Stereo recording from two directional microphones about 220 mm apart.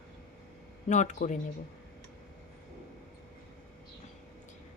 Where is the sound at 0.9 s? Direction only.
35° left (ahead or behind).